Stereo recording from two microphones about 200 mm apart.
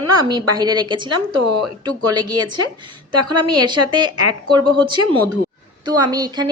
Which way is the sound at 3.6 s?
20° right (ahead or behind).